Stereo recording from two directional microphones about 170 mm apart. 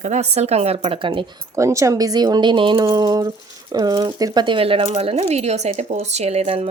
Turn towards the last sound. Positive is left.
turn(degrees=-35)  # may be behind; listen again after turning